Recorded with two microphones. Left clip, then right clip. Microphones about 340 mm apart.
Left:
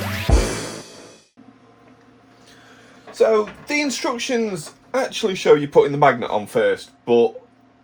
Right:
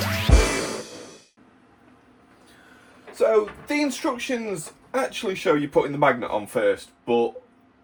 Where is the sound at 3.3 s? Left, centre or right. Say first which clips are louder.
Left 2 dB; left.